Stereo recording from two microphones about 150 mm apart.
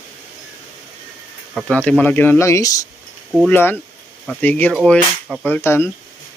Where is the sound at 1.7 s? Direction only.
10° left (ahead or behind).